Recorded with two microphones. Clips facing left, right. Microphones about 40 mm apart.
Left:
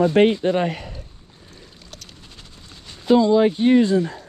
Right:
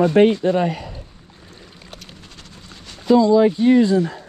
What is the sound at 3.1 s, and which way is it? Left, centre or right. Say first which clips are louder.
Speech: right 2 dB; left.